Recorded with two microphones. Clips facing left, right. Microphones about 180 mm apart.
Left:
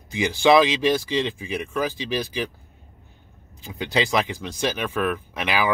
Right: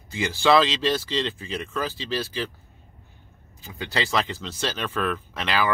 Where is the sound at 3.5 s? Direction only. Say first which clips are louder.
Left 5 dB; 20° left (ahead or behind).